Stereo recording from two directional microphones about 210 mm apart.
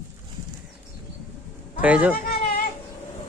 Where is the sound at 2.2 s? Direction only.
45° left (ahead or behind).